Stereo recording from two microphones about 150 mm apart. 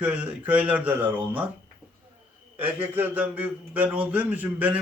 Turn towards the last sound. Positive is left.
turn(degrees=-10)  # may be behind; listen again after turning